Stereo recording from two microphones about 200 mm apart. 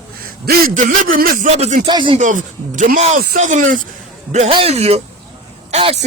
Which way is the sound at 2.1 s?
40° right (ahead or behind).